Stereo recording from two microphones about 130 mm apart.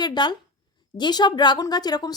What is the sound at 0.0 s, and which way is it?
Speech, 35° left (ahead or behind).